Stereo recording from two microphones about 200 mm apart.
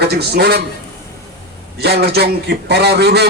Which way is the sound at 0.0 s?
55° right (ahead or behind).